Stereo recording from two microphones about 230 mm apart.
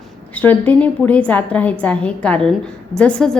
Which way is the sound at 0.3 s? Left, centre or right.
Centre.